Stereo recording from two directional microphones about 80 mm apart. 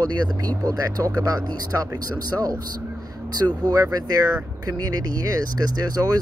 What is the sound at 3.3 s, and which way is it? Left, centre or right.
Speech, right.